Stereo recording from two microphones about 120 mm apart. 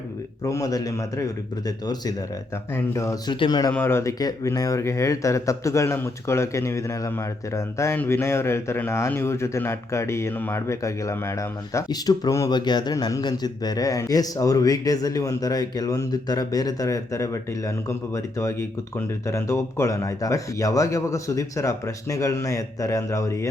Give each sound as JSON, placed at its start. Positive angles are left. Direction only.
{"t": 0.4, "sound": "a man's voice", "side_deg": 30}
{"t": 3.7, "sound": "a man's voice", "side_deg": 15}
{"t": 4.2, "sound": "a man's voice", "side_deg": 30}